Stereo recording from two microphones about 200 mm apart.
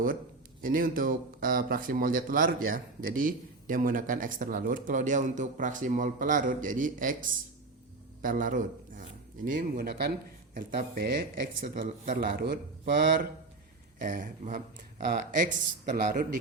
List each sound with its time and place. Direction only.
0.6 s speech: 45° right (ahead or behind)